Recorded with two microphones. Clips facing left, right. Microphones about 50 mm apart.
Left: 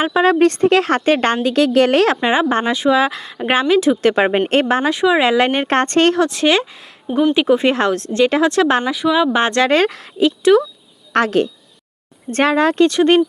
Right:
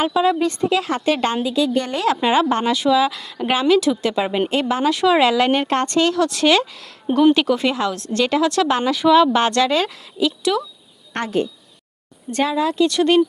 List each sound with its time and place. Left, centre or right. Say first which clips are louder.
0.2 s a woman's voice: left 8 dB; left
1.5 s a woman's voice: left 6 dB; left
2.2 s speech: left 1 dB; left
4.0 s a woman's voice: left 5 dB; left
6.1 s speech: left 1 dB; left
7.8 s speech: left 5 dB; left
8.1 s speech: left 3 dB; left
8.9 s speech: right 2 dB; centre
9.3 s speech: left 2 dB; left
9.6 s a woman's voice: left 5 dB; left
11.2 s speech: left 6 dB; left
12.3 s a woman's voice: left 5 dB; left
12.9 s speech: left 3 dB; left